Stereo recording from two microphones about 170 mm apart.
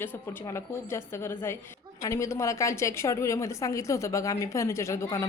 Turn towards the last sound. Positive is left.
turn(degrees=15)  # may be behind; listen again after turning